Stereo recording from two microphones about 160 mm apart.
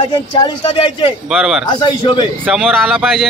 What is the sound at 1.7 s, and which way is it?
Speech, 30° left (ahead or behind).